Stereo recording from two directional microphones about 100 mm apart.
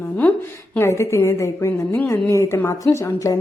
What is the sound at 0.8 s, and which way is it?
A woman's voice, 30° left (ahead or behind).